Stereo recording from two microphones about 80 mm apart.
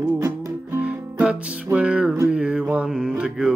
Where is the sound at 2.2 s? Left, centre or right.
Centre.